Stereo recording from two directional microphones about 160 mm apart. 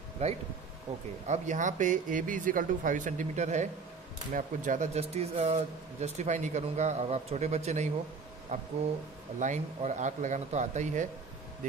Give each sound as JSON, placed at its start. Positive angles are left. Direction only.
{"t": 0.2, "sound": "speech", "side_deg": -40}